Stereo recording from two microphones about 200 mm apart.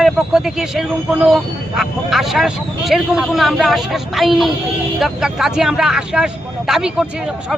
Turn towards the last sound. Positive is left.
turn(degrees=-5)  # may be behind; listen again after turning